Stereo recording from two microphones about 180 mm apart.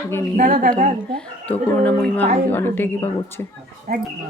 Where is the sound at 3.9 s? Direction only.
55° right (ahead or behind).